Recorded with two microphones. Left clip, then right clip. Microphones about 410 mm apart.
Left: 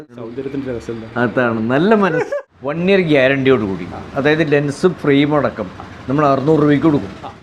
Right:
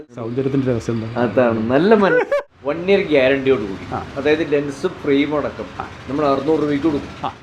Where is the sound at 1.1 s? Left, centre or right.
Centre.